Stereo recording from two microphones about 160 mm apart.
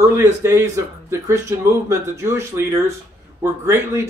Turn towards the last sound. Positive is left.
turn(degrees=-15)  # may be behind; listen again after turning